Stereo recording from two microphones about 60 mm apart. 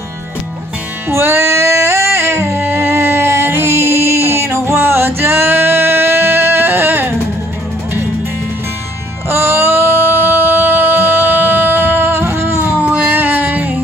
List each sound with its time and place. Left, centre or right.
1.0 s music: right
9.3 s music: right